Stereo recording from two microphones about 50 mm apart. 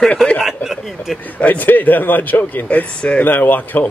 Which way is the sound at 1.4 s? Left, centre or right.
Left.